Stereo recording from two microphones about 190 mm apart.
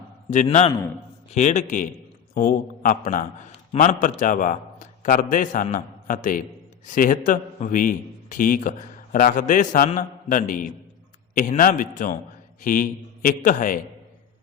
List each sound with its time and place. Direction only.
0.3 s a man's voice: 35° left (ahead or behind)